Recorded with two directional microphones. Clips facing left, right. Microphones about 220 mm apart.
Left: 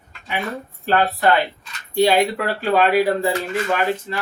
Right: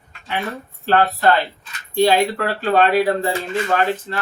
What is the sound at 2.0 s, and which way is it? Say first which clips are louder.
Speech: even; 10° left (ahead or behind).